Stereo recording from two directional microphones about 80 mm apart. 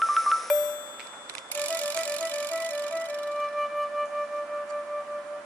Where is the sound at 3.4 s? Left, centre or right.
Centre.